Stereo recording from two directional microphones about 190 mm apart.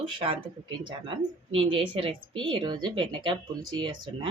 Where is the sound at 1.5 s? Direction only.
25° right (ahead or behind).